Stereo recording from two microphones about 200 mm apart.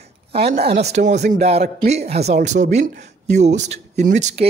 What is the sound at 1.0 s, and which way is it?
Speech, 55° right (ahead or behind).